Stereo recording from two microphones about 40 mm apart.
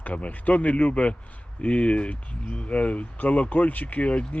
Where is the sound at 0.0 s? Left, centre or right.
Left.